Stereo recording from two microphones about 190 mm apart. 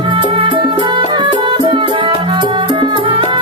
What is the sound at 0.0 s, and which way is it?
Music, 25° right (ahead or behind).